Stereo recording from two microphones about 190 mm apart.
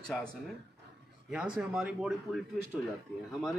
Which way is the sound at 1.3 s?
5° right (ahead or behind).